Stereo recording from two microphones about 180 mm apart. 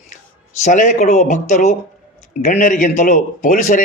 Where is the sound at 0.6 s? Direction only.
45° left (ahead or behind).